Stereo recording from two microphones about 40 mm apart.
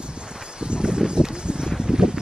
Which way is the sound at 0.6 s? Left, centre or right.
Right.